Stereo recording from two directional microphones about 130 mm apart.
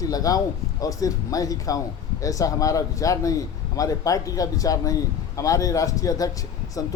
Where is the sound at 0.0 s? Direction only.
30° left (ahead or behind).